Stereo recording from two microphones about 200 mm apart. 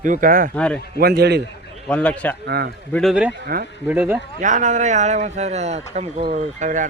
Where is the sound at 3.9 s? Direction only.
10° right (ahead or behind).